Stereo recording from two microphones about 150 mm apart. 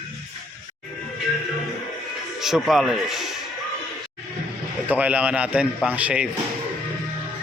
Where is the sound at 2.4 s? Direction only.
Centre (ahead or behind).